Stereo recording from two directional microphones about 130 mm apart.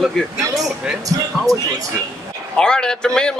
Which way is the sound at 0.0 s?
Centre (ahead or behind).